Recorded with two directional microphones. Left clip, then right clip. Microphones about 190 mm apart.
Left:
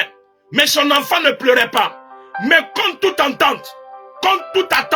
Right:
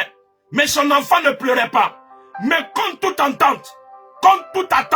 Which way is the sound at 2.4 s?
15° right (ahead or behind).